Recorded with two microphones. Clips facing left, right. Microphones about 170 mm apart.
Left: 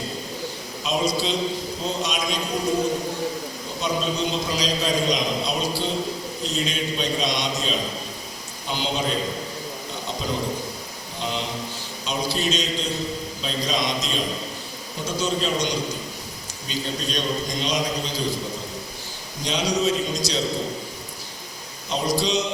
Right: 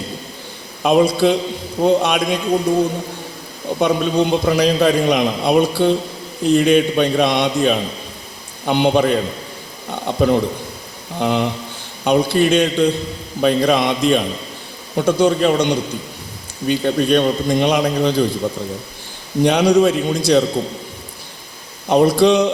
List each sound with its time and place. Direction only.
0.8 s a man's voice: 60° right (ahead or behind)
3.8 s a man's voice: 60° right (ahead or behind)
9.9 s a sound: 60° right (ahead or behind)
11.2 s a man's voice: 60° right (ahead or behind)
19.4 s a man's voice: 60° right (ahead or behind)
21.8 s a man's voice: 60° right (ahead or behind)